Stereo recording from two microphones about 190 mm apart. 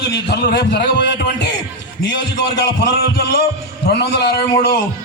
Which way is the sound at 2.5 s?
60° left (ahead or behind).